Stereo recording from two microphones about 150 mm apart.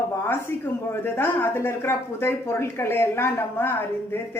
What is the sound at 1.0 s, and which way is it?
Speech, 15° left (ahead or behind).